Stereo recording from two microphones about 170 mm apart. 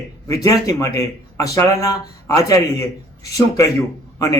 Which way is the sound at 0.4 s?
20° left (ahead or behind).